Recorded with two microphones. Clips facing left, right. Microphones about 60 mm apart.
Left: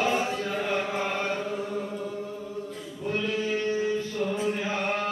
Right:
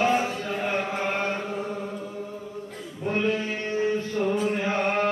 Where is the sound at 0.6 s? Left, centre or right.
Right.